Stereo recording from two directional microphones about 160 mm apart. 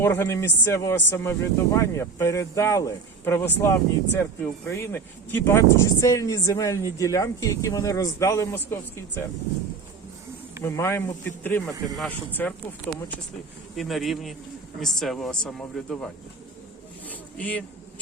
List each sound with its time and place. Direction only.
0.0 s speech: 15° left (ahead or behind)
10.6 s speech: 15° left (ahead or behind)
17.1 s a sound: 10° left (ahead or behind)